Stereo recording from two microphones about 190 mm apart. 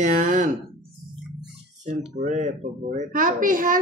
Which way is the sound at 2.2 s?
40° right (ahead or behind).